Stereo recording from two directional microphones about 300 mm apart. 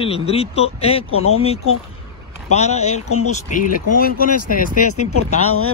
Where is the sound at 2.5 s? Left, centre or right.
Left.